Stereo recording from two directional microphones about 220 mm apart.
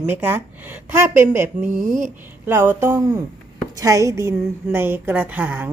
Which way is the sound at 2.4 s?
10° right (ahead or behind).